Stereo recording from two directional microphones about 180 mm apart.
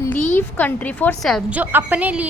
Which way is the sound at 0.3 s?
10° left (ahead or behind).